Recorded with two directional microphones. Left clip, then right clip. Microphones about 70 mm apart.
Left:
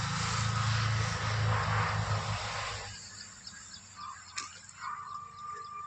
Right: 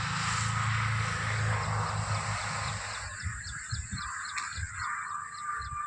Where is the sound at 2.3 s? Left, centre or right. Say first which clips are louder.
Right 2 dB; right.